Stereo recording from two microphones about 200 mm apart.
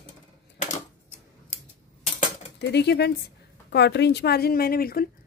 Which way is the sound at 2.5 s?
55° left (ahead or behind).